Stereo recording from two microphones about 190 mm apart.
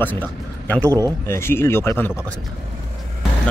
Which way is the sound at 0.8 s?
20° right (ahead or behind).